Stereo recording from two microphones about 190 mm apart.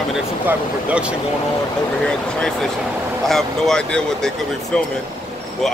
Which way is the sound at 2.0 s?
5° left (ahead or behind).